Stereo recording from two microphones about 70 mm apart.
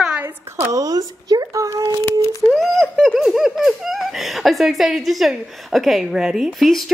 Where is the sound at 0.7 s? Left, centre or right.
Right.